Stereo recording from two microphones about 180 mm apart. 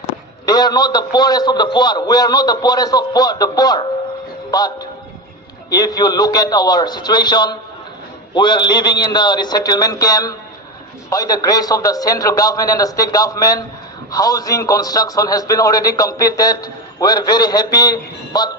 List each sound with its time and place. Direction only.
0.4 s a man's voice: 20° left (ahead or behind)